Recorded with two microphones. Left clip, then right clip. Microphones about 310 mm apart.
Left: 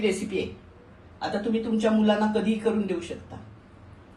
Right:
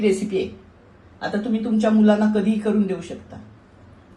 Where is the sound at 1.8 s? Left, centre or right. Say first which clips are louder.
Right 5 dB; right.